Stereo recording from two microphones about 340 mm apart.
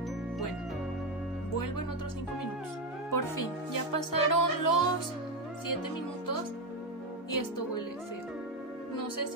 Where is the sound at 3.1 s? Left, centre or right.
Left.